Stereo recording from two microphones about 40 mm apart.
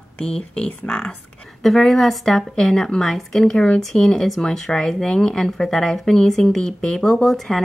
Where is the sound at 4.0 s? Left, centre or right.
Left.